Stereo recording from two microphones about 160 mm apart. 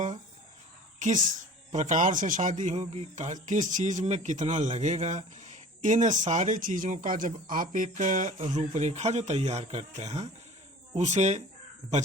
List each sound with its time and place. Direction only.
0.9 s a woman's voice: 50° right (ahead or behind)